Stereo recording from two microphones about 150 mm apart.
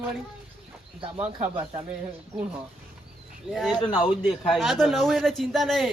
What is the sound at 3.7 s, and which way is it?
Speech, 25° left (ahead or behind).